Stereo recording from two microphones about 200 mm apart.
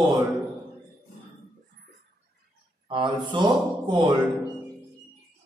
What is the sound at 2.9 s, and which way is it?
Speech, 25° right (ahead or behind).